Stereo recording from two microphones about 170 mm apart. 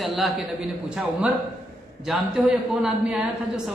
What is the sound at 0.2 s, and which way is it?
A man's voice, centre (ahead or behind).